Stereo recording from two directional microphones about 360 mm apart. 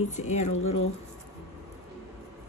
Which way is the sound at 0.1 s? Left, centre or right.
Centre.